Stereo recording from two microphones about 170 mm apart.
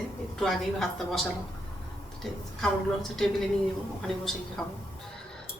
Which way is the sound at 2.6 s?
Centre (ahead or behind).